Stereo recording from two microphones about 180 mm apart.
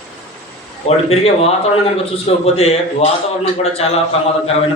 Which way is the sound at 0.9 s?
35° left (ahead or behind).